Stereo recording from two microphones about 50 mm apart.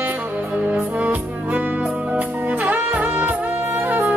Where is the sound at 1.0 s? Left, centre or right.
Right.